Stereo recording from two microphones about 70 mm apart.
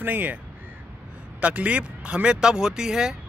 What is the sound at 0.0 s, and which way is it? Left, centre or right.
Speech, right.